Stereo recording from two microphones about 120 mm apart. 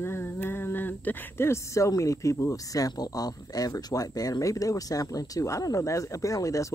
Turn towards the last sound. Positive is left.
turn(degrees=25)  # may be behind; listen again after turning